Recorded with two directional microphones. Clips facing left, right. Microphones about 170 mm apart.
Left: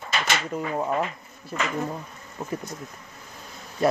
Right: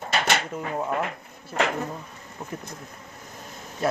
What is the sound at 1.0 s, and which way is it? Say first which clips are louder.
Speech: even; 60° right (ahead or behind).